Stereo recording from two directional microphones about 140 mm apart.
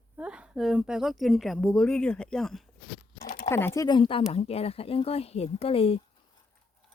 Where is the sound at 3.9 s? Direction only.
35° left (ahead or behind).